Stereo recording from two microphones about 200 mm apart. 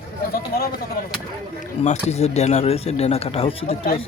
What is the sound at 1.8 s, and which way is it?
Speech, 35° left (ahead or behind).